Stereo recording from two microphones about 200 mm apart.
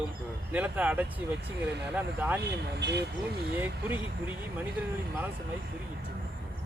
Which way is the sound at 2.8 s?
55° right (ahead or behind).